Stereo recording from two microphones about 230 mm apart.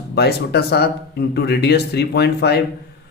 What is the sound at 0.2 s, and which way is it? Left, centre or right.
Speech, left.